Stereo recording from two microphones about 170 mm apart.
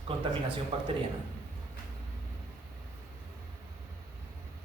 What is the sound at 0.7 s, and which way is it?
Speech, 35° right (ahead or behind).